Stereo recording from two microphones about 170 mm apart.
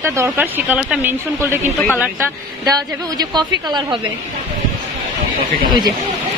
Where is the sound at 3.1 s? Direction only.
25° right (ahead or behind).